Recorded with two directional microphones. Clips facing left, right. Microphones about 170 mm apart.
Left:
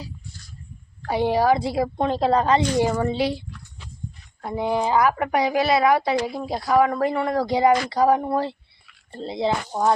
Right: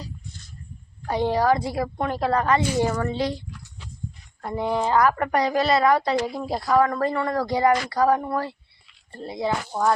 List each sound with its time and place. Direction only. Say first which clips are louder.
1.0 s speech: left 2 dB; 10° left (ahead or behind)
1.6 s speech: left 3 dB; 25° left (ahead or behind)